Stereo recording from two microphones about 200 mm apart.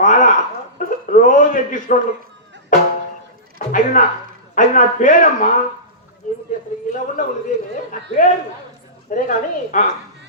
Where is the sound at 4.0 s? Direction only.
40° left (ahead or behind).